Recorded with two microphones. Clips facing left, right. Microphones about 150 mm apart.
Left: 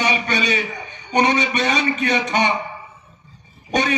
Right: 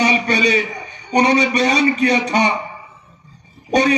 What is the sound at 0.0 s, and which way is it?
A man's voice, 35° right (ahead or behind).